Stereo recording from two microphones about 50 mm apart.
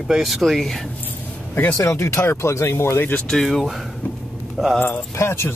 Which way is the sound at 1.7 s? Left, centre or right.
Left.